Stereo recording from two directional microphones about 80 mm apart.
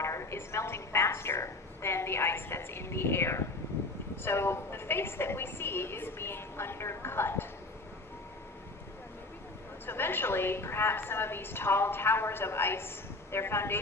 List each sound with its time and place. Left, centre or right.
0.0 s a woman's voice: left
9.8 s a woman's voice: left